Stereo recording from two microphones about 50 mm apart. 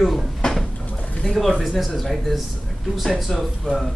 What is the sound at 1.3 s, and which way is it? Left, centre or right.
Speech, centre.